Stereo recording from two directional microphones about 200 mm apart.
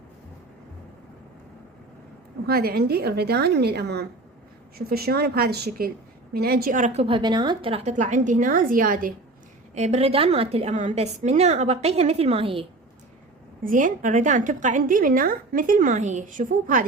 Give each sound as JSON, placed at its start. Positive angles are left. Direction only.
{"t": 2.5, "sound": "a woman's voice", "side_deg": -50}
{"t": 9.7, "sound": "a woman's voice", "side_deg": -35}
{"t": 13.7, "sound": "a woman's voice", "side_deg": -40}